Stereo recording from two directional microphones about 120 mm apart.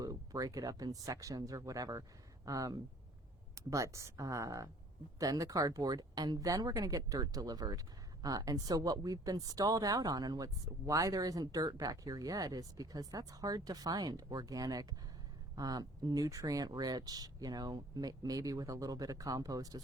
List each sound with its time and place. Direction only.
0.0 s speech: 30° right (ahead or behind)
3.5 s a sound: 25° right (ahead or behind)
3.9 s speech: 25° right (ahead or behind)